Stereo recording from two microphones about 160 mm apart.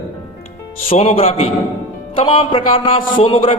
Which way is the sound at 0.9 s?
40° left (ahead or behind).